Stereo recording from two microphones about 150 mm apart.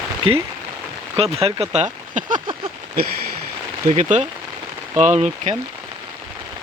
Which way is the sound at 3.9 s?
50° right (ahead or behind).